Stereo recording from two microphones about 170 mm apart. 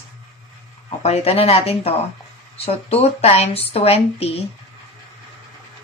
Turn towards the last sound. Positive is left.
turn(degrees=35)  # may be behind; listen again after turning